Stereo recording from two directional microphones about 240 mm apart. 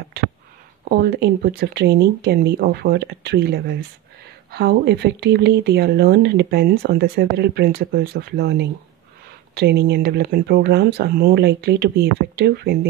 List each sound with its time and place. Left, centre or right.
0.8 s speech: right